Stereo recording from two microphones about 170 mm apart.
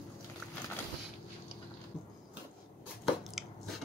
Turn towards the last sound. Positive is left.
turn(degrees=0)  # may be behind; listen again after turning